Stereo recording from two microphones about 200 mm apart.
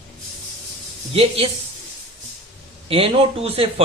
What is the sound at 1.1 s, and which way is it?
Speech, 30° right (ahead or behind).